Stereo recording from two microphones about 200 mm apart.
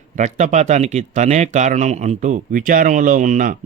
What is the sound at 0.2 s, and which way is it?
Speech, 35° right (ahead or behind).